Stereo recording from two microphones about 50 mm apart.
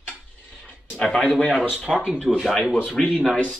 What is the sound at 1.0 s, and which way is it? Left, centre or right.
Speech, centre.